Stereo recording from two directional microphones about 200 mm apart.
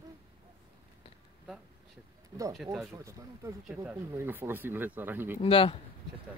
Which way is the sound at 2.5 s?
Centre (ahead or behind).